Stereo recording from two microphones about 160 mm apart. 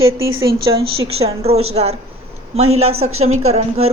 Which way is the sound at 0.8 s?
40° right (ahead or behind).